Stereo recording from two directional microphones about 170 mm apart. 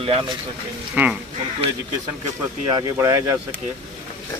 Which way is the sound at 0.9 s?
10° right (ahead or behind).